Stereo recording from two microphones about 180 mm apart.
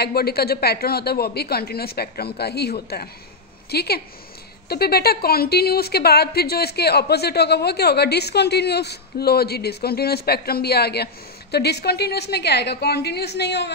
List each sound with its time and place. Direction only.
0.0 s a woman's voice: 60° left (ahead or behind)